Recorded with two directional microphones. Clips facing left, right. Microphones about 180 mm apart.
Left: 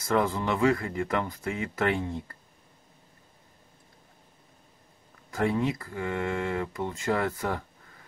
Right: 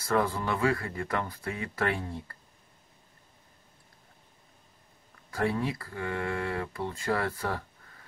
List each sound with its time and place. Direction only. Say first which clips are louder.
0.0 s speech: left 2 dB; 20° left (ahead or behind)
5.3 s speech: left 3 dB; 20° left (ahead or behind)